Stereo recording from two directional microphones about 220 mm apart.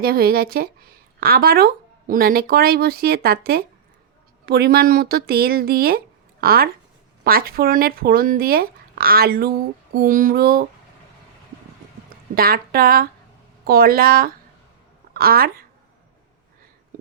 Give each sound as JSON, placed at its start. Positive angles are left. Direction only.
{"t": 0.0, "sound": "speech", "side_deg": -45}
{"t": 9.9, "sound": "a sound", "side_deg": -40}
{"t": 12.3, "sound": "speech", "side_deg": -45}